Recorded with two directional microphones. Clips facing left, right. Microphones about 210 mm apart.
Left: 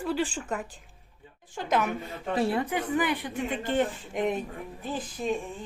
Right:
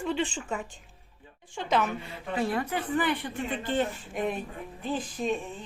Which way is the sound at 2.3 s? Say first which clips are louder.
Left 2 dB; 25° left (ahead or behind).